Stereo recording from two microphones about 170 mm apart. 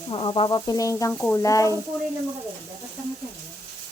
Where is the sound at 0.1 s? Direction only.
30° left (ahead or behind).